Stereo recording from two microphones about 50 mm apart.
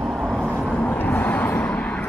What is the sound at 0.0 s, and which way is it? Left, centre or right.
Vehicle, centre.